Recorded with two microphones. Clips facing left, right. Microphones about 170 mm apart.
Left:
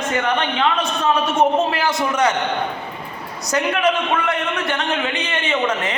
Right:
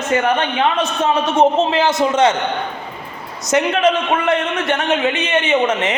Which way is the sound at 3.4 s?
20° right (ahead or behind).